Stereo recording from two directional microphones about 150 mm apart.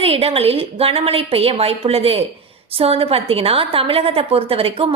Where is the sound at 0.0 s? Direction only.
40° right (ahead or behind).